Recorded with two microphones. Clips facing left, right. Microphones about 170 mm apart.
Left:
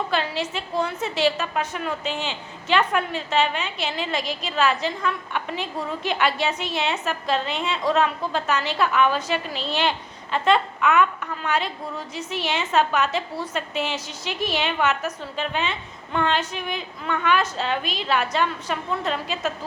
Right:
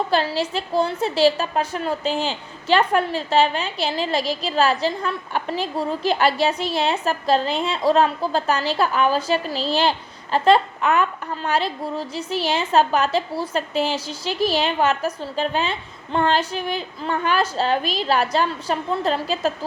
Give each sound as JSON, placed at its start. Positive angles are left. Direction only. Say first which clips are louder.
{"t": 0.1, "sound": "a woman's voice", "louder": "right 4 dB", "side_deg": -35}